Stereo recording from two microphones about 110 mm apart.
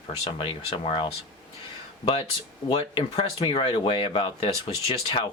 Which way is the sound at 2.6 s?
45° left (ahead or behind).